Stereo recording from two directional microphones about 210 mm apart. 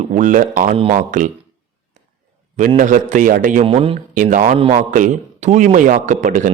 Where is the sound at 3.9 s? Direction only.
40° right (ahead or behind).